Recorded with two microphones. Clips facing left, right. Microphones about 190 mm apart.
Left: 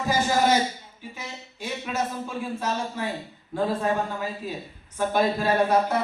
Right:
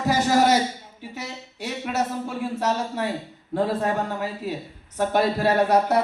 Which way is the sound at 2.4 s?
75° right (ahead or behind).